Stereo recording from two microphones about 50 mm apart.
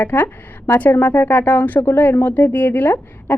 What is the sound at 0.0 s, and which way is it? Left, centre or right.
A woman's voice, left.